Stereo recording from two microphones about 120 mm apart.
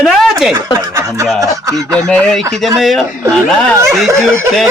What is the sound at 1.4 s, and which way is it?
Speech, 30° right (ahead or behind).